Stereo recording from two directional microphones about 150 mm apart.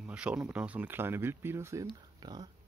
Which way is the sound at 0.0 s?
5° right (ahead or behind).